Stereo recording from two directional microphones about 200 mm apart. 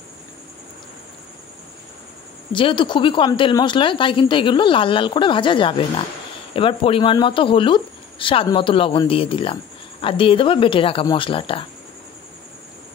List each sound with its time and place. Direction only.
2.5 s speech: 25° left (ahead or behind)